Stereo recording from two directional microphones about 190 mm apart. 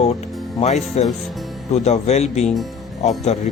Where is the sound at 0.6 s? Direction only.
35° left (ahead or behind).